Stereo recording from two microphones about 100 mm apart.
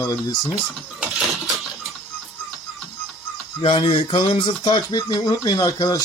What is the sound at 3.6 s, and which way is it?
Speech, 70° left (ahead or behind).